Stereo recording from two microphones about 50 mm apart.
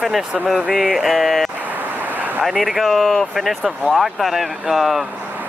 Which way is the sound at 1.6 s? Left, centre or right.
Right.